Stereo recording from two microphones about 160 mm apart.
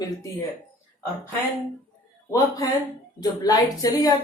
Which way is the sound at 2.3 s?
20° left (ahead or behind).